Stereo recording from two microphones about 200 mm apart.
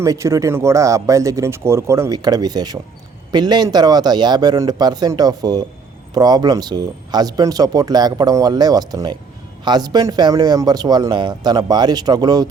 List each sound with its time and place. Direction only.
0.0 s speech: 15° right (ahead or behind)